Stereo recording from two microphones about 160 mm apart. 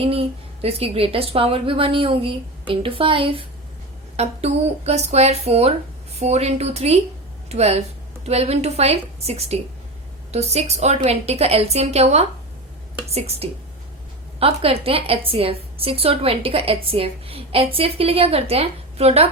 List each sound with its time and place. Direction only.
0.0 s a woman's voice: 35° right (ahead or behind)